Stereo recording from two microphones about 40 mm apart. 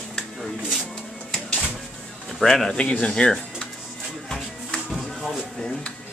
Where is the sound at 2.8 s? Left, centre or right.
Left.